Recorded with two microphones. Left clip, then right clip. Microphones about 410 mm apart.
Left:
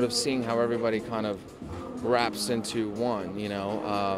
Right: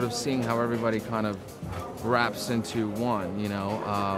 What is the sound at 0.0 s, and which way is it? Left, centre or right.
Speech, left.